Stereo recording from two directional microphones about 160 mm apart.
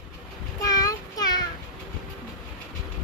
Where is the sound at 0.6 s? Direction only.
20° left (ahead or behind).